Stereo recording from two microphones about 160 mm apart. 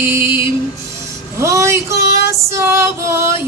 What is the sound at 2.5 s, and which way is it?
Music, 15° right (ahead or behind).